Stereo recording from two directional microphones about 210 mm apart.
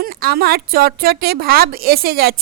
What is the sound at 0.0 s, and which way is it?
A woman's voice, 45° right (ahead or behind).